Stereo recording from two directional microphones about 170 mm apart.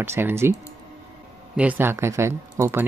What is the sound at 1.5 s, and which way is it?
Speech, 10° right (ahead or behind).